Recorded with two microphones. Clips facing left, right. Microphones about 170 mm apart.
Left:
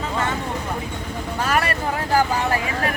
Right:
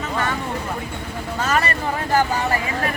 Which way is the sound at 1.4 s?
10° left (ahead or behind).